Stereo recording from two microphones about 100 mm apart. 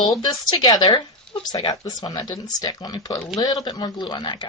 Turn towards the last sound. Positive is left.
turn(degrees=50)  # may be behind; listen again after turning